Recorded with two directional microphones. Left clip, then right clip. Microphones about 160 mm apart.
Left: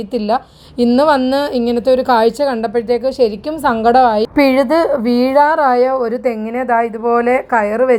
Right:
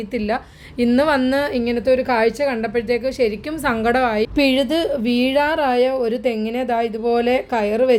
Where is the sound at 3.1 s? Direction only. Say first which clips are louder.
Left 5 dB; 20° left (ahead or behind).